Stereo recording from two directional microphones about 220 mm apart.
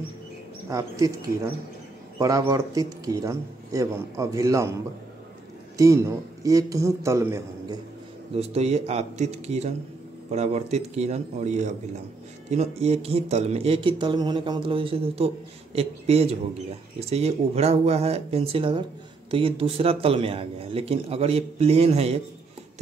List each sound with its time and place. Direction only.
0.7 s speech: 15° right (ahead or behind)
5.8 s speech: 15° right (ahead or behind)
8.4 s speech: 30° right (ahead or behind)